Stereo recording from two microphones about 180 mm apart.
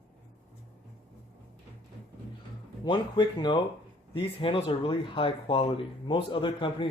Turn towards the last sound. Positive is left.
turn(degrees=30)  # may be behind; listen again after turning